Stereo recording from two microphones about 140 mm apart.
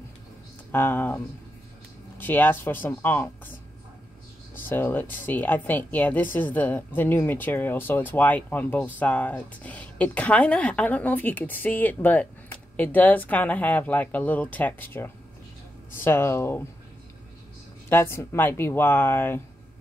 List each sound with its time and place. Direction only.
0.7 s a woman's voice: 15° left (ahead or behind)
4.6 s a woman's voice: 15° left (ahead or behind)
17.8 s a woman's voice: 15° left (ahead or behind)